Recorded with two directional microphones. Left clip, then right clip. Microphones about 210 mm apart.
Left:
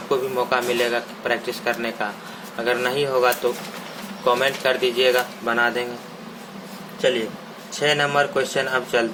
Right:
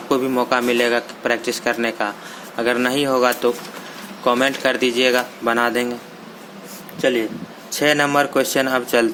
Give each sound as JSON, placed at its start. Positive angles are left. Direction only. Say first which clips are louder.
{"t": 0.1, "sound": "speech", "louder": "right 3 dB", "side_deg": -45}
{"t": 7.7, "sound": "speech", "louder": "right 3 dB", "side_deg": -45}